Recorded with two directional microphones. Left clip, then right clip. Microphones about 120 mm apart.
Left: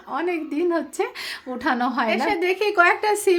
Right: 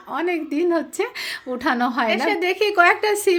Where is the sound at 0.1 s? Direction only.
20° right (ahead or behind).